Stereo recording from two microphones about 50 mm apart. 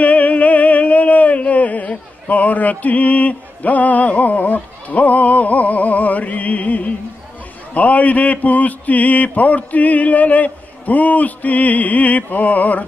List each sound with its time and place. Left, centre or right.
0.0 s music: left
7.7 s mantra: left